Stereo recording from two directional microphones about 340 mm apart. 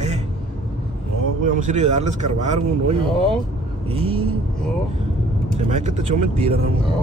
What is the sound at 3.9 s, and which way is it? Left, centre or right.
Vehicle, centre.